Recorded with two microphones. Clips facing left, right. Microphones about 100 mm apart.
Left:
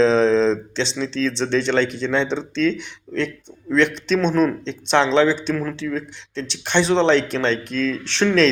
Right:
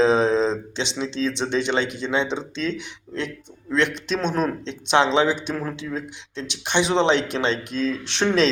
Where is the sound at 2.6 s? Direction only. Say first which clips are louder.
Left 8 dB; 60° left (ahead or behind).